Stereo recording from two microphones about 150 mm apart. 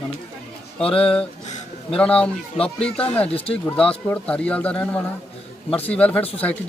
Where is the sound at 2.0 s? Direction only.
5° left (ahead or behind).